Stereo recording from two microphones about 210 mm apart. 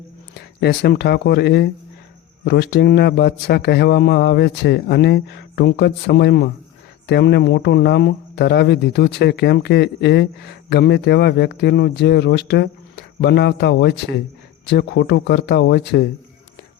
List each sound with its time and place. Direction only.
0.3 s speech: 50° left (ahead or behind)